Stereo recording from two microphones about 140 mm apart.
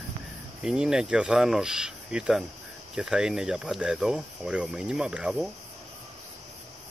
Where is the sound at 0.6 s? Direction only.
5° right (ahead or behind).